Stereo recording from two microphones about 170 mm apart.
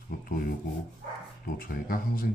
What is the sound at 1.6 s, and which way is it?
Speech, 60° left (ahead or behind).